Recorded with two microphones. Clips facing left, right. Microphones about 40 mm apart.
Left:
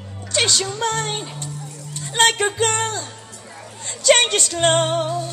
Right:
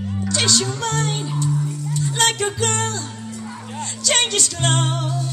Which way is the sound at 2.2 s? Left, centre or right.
Left.